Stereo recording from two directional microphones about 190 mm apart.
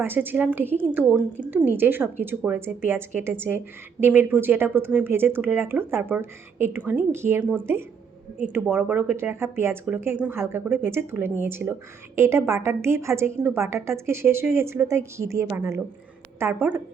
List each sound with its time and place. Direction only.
0.0 s speech: 10° right (ahead or behind)